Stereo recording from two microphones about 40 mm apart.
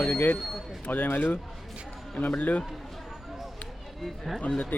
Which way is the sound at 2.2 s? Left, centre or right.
Left.